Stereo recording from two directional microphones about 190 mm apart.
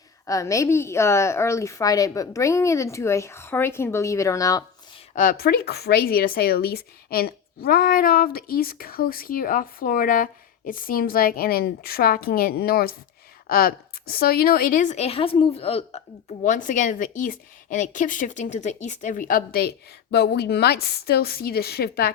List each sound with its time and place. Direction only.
0.3 s a woman's voice: 15° left (ahead or behind)
5.1 s speech: 45° left (ahead or behind); by 16.0 s 30° left (ahead or behind)
16.4 s speech: 40° left (ahead or behind)